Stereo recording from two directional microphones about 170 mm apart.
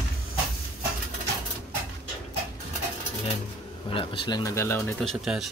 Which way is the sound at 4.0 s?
30° left (ahead or behind).